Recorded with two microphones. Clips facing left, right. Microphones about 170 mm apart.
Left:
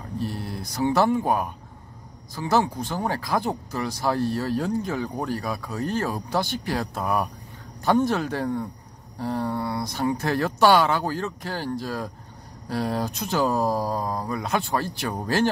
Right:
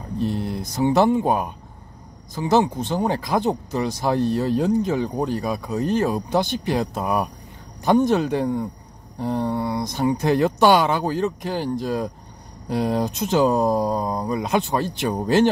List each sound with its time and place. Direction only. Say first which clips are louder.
0.2 s speech: right 7 dB; 20° right (ahead or behind)